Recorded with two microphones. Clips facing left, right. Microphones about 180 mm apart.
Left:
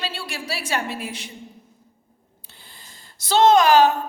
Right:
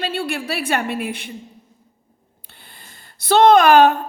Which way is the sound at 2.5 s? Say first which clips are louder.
Right 2 dB; 60° right (ahead or behind).